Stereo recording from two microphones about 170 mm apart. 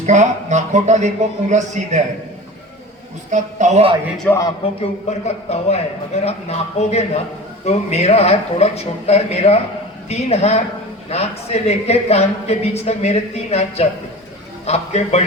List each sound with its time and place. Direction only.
0.0 s speech: 45° right (ahead or behind)
3.3 s speech: 45° right (ahead or behind)
4.3 s a man's voice: 10° left (ahead or behind)
4.6 s a woman's voice: 40° left (ahead or behind)